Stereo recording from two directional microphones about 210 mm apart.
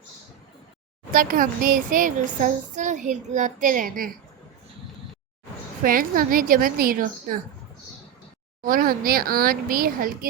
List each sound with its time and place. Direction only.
1.1 s a child's voice: 40° right (ahead or behind)
5.8 s a child's voice: 40° right (ahead or behind)
8.6 s speech: 40° right (ahead or behind)